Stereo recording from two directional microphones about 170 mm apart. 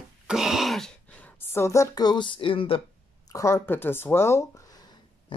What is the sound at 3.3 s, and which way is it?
Speech, 15° left (ahead or behind).